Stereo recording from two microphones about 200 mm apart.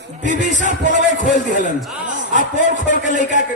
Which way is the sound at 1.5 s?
40° right (ahead or behind).